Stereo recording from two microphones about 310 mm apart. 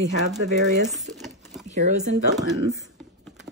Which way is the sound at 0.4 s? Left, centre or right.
Right.